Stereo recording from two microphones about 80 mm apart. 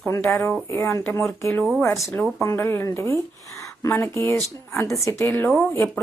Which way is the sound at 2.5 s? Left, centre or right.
Left.